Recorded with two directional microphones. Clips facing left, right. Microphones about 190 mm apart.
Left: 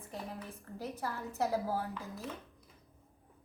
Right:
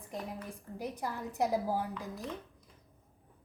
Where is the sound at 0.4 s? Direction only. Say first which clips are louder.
Right 2 dB; 15° right (ahead or behind).